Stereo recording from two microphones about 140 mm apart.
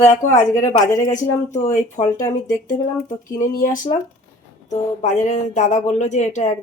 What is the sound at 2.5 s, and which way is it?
A woman's voice, 65° left (ahead or behind).